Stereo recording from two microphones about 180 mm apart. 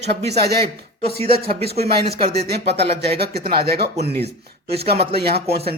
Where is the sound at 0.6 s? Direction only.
35° right (ahead or behind).